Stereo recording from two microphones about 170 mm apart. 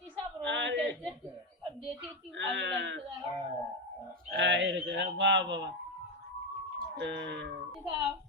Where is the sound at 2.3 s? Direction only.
90° right.